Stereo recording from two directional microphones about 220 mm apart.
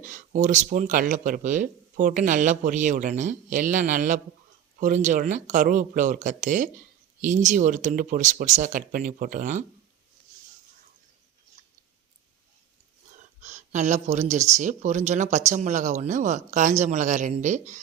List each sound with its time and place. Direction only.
0.0 s speech: 35° right (ahead or behind)
13.1 s speech: 30° right (ahead or behind)